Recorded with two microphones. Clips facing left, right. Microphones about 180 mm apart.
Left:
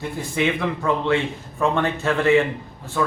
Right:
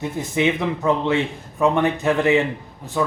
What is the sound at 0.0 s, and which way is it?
A man's voice, 20° right (ahead or behind).